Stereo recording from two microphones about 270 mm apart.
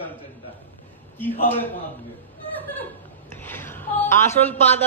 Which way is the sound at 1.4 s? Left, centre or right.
Centre.